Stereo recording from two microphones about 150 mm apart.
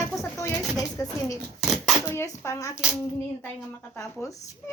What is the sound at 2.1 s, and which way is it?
Speech, 15° left (ahead or behind).